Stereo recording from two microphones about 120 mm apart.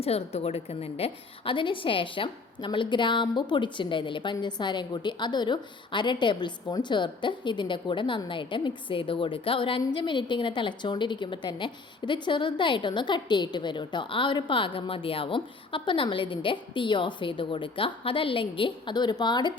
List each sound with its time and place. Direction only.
0.0 s a woman's voice: 55° left (ahead or behind); by 19.5 s 35° left (ahead or behind)